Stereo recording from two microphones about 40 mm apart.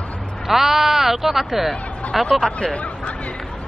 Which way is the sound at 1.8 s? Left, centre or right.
Left.